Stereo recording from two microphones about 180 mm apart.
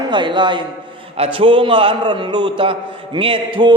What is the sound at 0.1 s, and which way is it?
A man's voice, 25° right (ahead or behind).